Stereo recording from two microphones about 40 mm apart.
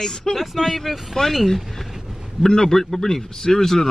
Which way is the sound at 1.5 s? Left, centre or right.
Centre.